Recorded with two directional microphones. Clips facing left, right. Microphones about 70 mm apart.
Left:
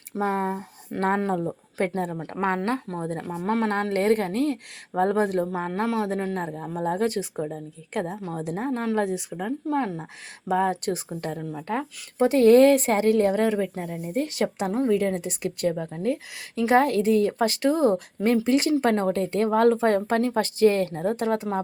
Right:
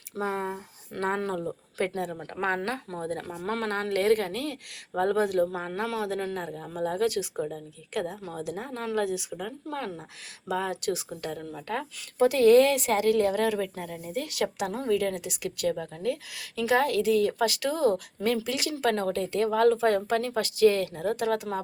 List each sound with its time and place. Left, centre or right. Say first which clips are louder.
0.2 s speech: left 5 dB; left
1.2 s speech: left 5 dB; left
3.7 s speech: even; left
10.5 s speech: left 5 dB; left